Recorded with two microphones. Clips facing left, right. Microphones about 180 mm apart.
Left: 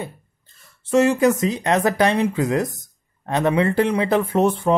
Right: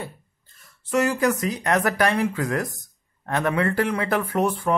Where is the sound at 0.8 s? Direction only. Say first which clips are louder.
Left 5 dB; 25° left (ahead or behind).